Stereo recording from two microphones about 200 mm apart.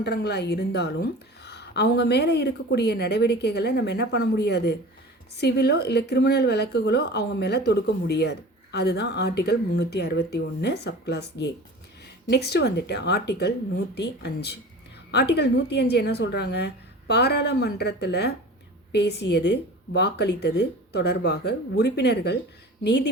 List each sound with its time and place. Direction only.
0.0 s speech: 55° left (ahead or behind)